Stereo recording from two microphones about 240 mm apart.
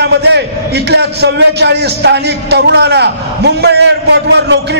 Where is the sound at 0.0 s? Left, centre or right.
Right.